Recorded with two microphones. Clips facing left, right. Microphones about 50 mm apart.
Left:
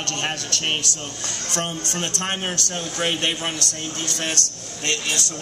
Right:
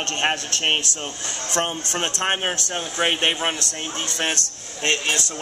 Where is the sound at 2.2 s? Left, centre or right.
Right.